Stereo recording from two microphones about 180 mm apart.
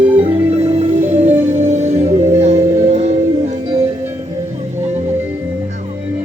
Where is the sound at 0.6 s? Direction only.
35° right (ahead or behind).